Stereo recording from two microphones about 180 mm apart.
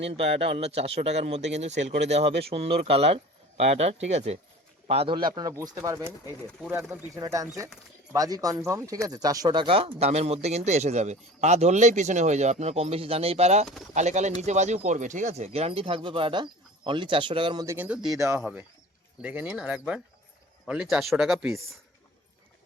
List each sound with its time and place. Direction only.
0.1 s speech: 30° right (ahead or behind)
17.7 s speech: 10° right (ahead or behind)